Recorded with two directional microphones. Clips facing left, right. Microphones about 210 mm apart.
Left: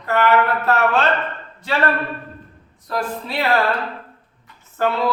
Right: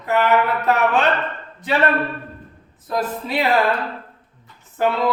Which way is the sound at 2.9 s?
20° right (ahead or behind).